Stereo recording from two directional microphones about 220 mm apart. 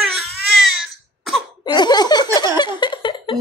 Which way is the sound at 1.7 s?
20° left (ahead or behind).